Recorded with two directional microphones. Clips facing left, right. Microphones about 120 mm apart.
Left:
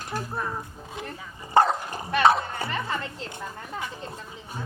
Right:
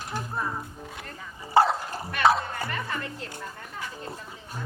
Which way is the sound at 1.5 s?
5° right (ahead or behind).